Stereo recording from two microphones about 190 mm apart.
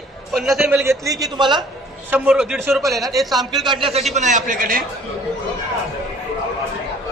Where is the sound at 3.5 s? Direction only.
25° right (ahead or behind); by 4.8 s 45° right (ahead or behind).